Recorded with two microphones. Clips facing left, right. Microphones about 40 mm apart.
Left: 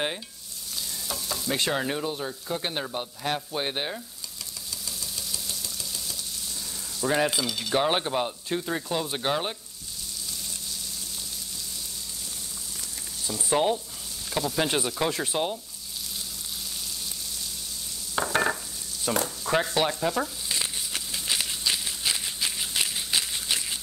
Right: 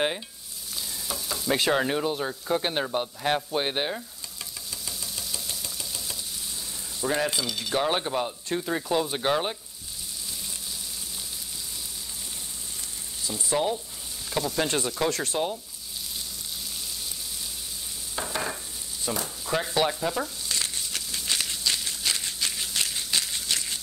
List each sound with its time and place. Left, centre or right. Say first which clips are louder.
1.0 s stir: right 3 dB; centre
4.8 s a sound: even; centre
7.1 s speech: left 2 dB; centre
7.7 s speech: left 1 dB; centre
13.5 s sizzle: left 2 dB; centre
14.3 s speech: even; centre
18.3 s stir: left 7 dB; left
19.1 s speech: left 4 dB; centre
19.6 s speech: even; centre
20.4 s a sound: even; centre